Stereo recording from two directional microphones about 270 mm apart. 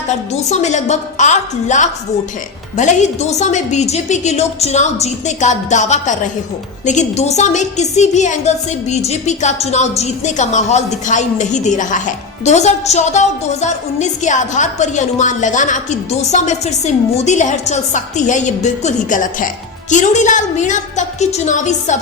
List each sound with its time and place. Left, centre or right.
0.1 s a woman's voice: left